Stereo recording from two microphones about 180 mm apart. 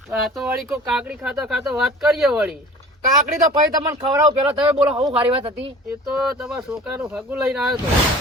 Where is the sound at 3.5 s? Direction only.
30° right (ahead or behind).